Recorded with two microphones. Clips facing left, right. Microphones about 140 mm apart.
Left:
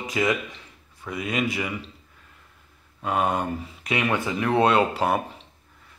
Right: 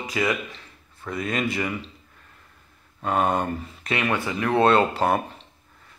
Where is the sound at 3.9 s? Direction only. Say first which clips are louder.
Even; 15° left (ahead or behind).